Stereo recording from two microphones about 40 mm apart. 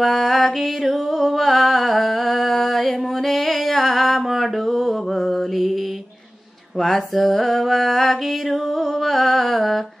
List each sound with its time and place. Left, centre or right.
0.0 s music: centre
6.8 s mantra: centre